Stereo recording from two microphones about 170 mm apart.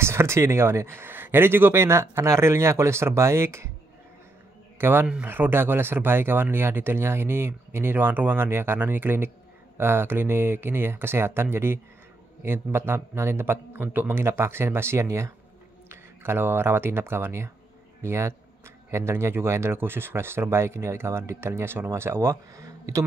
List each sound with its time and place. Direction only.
0.0 s speech: 15° right (ahead or behind)
4.7 s speech: 15° right (ahead or behind)